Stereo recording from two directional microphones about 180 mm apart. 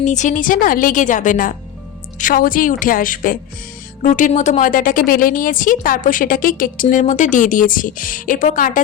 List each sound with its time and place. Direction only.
0.0 s a woman's voice: 40° left (ahead or behind)